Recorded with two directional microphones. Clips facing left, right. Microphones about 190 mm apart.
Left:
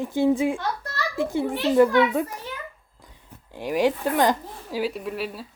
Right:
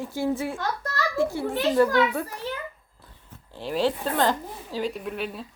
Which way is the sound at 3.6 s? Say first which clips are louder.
Left 3 dB; 15° left (ahead or behind).